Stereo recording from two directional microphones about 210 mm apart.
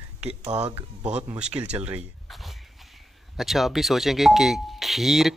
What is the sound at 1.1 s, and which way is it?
Speech, 5° right (ahead or behind).